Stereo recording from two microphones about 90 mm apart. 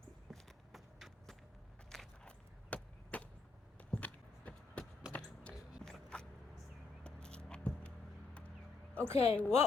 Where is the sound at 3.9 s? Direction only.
15° left (ahead or behind).